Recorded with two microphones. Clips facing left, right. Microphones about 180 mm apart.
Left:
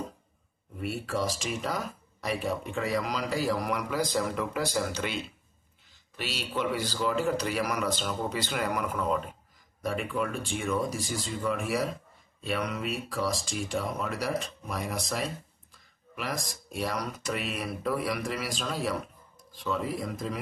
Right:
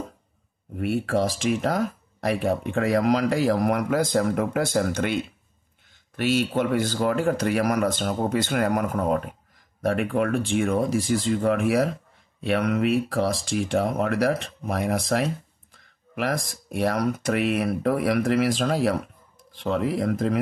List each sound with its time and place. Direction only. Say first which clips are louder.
0.7 s speech: right 8 dB; 60° right (ahead or behind)